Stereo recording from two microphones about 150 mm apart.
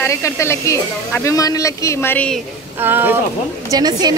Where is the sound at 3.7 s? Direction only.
25° right (ahead or behind).